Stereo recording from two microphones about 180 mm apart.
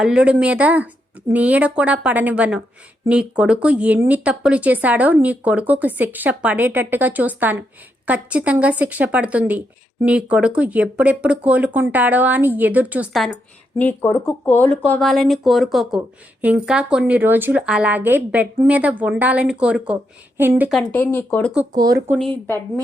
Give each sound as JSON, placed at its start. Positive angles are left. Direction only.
{"t": 0.0, "sound": "speech", "side_deg": -5}
{"t": 13.7, "sound": "a woman's voice", "side_deg": 10}
{"t": 20.7, "sound": "a woman's voice", "side_deg": 0}
{"t": 21.8, "sound": "speech", "side_deg": -20}